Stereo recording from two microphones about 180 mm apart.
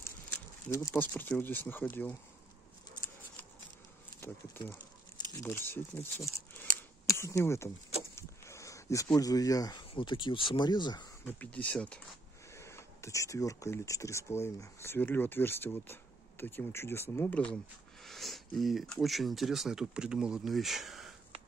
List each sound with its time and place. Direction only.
0.7 s speech: 15° left (ahead or behind)
4.2 s speech: 15° left (ahead or behind)
6.6 s a sound: 15° left (ahead or behind)
8.2 s speech: 15° left (ahead or behind)
11.2 s speech: 10° left (ahead or behind)